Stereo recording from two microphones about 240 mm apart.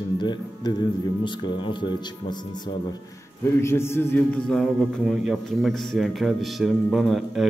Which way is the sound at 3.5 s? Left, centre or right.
Centre.